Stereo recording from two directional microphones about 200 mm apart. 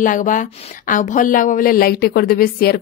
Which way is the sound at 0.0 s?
40° left (ahead or behind).